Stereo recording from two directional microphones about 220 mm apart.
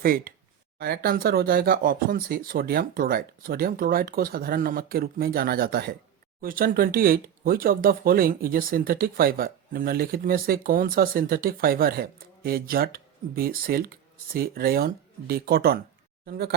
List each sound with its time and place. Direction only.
0.0 s speech: 40° right (ahead or behind)